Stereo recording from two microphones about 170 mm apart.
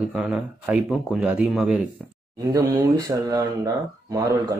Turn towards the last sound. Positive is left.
turn(degrees=-20)  # may be behind; listen again after turning